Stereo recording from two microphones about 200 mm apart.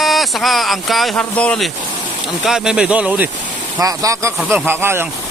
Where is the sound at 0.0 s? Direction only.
Centre (ahead or behind).